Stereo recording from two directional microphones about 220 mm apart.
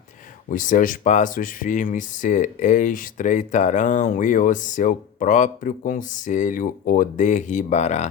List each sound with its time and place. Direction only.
0.5 s speech: 35° left (ahead or behind)